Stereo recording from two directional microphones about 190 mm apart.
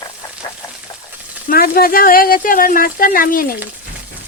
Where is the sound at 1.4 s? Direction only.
50° left (ahead or behind).